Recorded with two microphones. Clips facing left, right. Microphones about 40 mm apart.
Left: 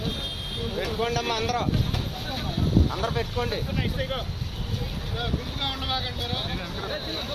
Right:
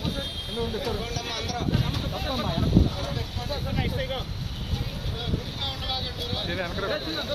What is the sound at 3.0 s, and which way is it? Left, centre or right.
Speech, left.